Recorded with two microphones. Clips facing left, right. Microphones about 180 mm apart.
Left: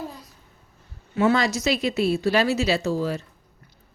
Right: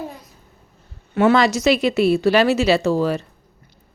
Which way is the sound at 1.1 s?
75° right (ahead or behind).